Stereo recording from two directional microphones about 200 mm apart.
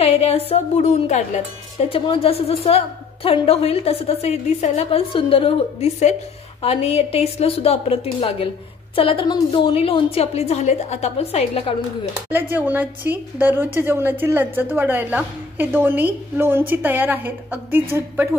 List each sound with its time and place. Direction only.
0.0 s a woman's voice: 30° left (ahead or behind)
12.3 s a woman's voice: 10° right (ahead or behind)